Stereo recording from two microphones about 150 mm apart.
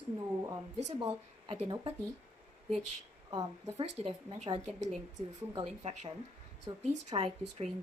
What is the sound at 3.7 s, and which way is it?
Speech, 40° right (ahead or behind).